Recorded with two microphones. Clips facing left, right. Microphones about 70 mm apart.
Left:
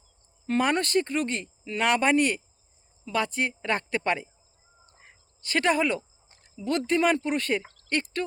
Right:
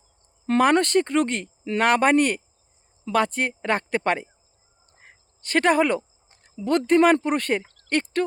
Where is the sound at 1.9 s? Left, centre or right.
Right.